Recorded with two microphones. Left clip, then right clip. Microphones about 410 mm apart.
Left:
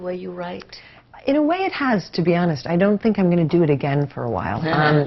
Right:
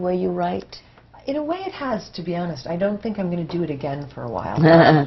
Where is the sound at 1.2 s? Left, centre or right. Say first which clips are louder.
Left 6 dB; left.